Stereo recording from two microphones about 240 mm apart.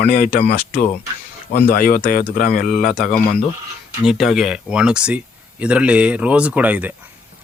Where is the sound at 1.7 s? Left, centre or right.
Left.